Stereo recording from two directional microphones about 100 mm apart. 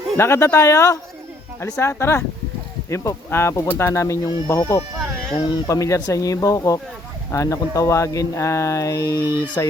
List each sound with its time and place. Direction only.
0.2 s speech: 25° left (ahead or behind)
4.9 s a sound: 5° left (ahead or behind)
5.6 s speech: 30° left (ahead or behind)